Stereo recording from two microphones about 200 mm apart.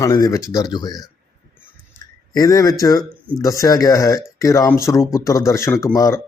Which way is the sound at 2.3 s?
15° left (ahead or behind).